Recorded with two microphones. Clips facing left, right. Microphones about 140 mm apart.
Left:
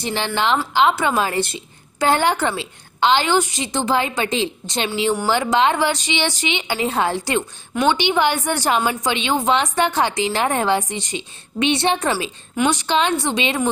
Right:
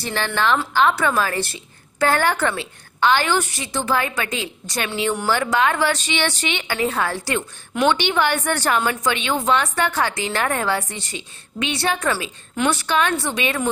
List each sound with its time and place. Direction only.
0.0 s a woman's voice: 20° left (ahead or behind)